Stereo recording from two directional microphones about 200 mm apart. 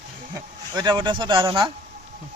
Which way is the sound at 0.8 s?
20° right (ahead or behind).